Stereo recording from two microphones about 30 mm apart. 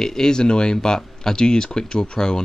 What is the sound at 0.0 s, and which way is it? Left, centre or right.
Speech, left.